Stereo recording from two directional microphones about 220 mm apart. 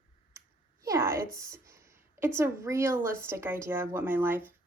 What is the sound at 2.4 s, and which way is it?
Speech, 10° right (ahead or behind).